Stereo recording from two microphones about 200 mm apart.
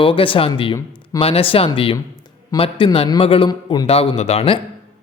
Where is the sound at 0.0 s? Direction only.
25° left (ahead or behind).